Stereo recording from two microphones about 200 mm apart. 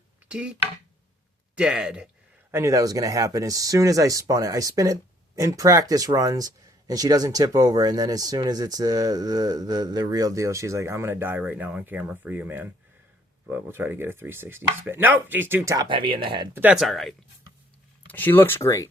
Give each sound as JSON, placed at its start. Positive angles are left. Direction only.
{"t": 0.3, "sound": "speech", "side_deg": -5}
{"t": 1.5, "sound": "speech", "side_deg": -5}
{"t": 16.6, "sound": "speech", "side_deg": -5}